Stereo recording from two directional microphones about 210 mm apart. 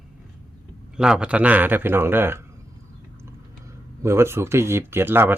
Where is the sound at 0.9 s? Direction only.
5° right (ahead or behind).